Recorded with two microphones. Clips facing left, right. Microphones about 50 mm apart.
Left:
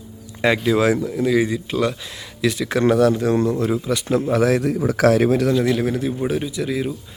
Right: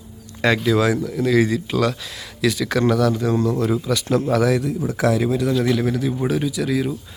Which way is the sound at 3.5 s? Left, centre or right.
Centre.